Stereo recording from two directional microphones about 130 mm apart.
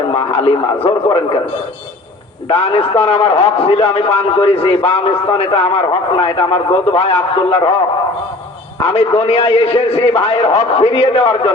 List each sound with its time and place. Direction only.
0.1 s radio: 45° left (ahead or behind)
0.9 s a man's voice: 45° left (ahead or behind)
2.5 s a man's voice: 45° left (ahead or behind)
8.9 s a man's voice: 45° left (ahead or behind)